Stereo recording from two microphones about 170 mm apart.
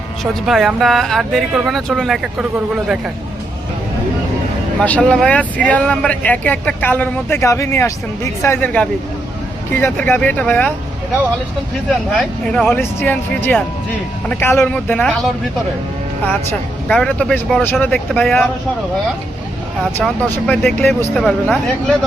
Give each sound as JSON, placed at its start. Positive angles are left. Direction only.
{"t": 0.4, "sound": "speech", "side_deg": 0}
{"t": 4.8, "sound": "speech", "side_deg": 5}
{"t": 12.1, "sound": "speech", "side_deg": 5}
{"t": 20.5, "sound": "speech", "side_deg": 5}